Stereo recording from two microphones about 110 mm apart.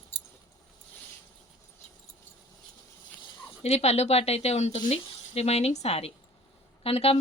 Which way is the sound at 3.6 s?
75° left (ahead or behind).